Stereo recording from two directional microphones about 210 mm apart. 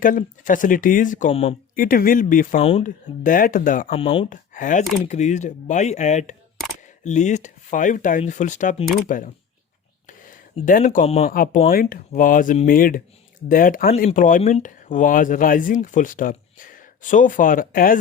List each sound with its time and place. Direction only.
0.0 s speech: 40° left (ahead or behind)
1.7 s speech: 40° left (ahead or behind)
2.6 s speech: 30° left (ahead or behind)
3.2 s speech: 40° left (ahead or behind)
3.8 s speech: 25° left (ahead or behind)
4.3 s speech: 40° left (ahead or behind)
11.3 s speech: 45° left (ahead or behind)